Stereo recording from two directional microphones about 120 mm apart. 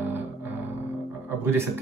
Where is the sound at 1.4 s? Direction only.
20° right (ahead or behind).